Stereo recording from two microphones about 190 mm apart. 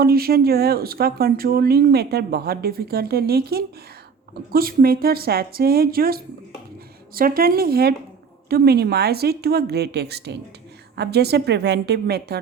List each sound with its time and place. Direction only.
0.0 s a woman's voice: 50° right (ahead or behind)